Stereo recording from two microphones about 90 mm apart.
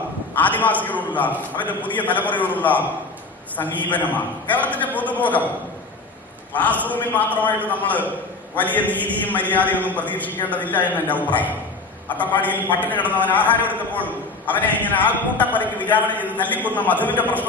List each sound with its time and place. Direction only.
0.3 s a man's voice: 20° left (ahead or behind)
3.8 s a man's voice: 20° left (ahead or behind)
6.5 s a man's voice: 20° left (ahead or behind)